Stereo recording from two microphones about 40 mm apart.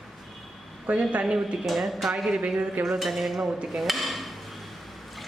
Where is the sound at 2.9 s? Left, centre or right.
Centre.